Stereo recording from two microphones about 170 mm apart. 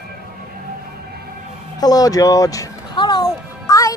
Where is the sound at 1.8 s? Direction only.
20° left (ahead or behind).